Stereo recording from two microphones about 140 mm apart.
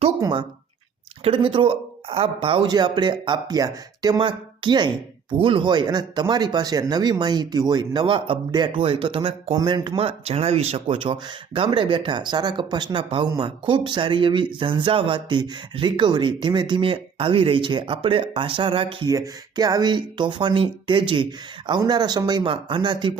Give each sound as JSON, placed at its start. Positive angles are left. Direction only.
{"t": 0.2, "sound": "speech", "side_deg": -30}
{"t": 10.0, "sound": "speech", "side_deg": -45}
{"t": 19.0, "sound": "speech", "side_deg": -25}